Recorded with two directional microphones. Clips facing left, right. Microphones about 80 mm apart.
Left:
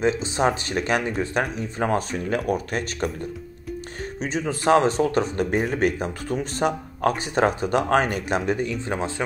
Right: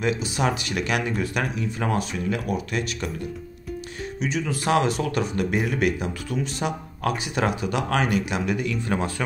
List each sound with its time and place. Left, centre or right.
0.0 s speech: left
4.2 s speech: left